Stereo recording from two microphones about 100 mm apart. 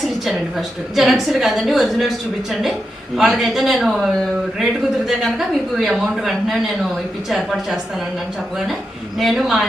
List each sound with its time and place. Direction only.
0.9 s a woman's voice: centre (ahead or behind)
9.1 s a woman's voice: centre (ahead or behind)